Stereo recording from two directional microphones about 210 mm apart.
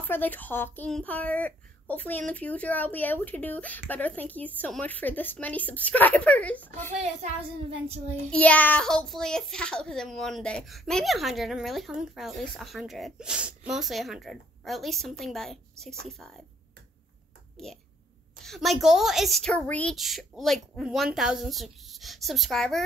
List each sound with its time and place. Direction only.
0.0 s speech: 10° left (ahead or behind)
6.9 s a child's voice: 30° right (ahead or behind)
8.3 s a woman's voice: 5° left (ahead or behind)
18.4 s a woman's voice: centre (ahead or behind)